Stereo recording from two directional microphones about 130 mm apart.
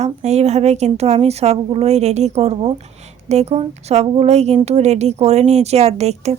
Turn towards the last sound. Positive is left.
turn(degrees=-55)  # may be behind; listen again after turning